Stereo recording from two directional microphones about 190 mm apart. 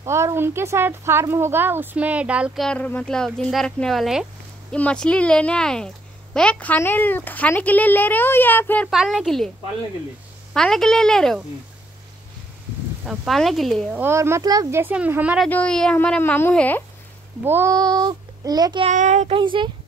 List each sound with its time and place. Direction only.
0.0 s speech: 15° right (ahead or behind); by 8.8 s 10° left (ahead or behind)
8.9 s speech: centre (ahead or behind)
10.5 s speech: 5° left (ahead or behind)
13.0 s speech: 5° right (ahead or behind)
14.0 s speech: 15° right (ahead or behind)
15.4 s speech: 5° left (ahead or behind)
17.4 s a child's voice: 15° right (ahead or behind)
18.9 s speech: 40° right (ahead or behind)